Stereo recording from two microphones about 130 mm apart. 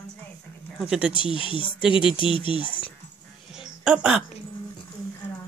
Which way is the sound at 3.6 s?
5° right (ahead or behind).